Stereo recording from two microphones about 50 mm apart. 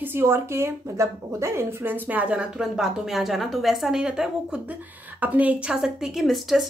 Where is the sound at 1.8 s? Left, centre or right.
Right.